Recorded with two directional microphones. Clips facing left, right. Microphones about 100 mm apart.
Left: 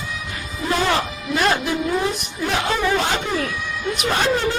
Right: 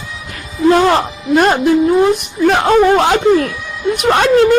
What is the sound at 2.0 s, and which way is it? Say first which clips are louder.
Speech: right 12 dB; 65° right (ahead or behind).